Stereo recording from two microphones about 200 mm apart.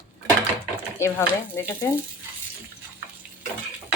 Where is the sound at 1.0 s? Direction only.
15° left (ahead or behind).